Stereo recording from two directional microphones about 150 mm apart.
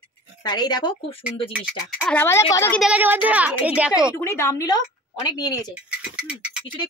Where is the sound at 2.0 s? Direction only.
15° left (ahead or behind).